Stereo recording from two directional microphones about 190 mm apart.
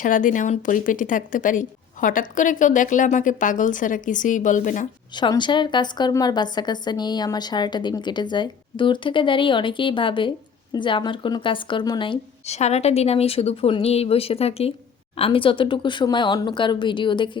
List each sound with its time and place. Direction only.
0.0 s speech: 45° left (ahead or behind)
5.1 s a woman's voice: 25° left (ahead or behind)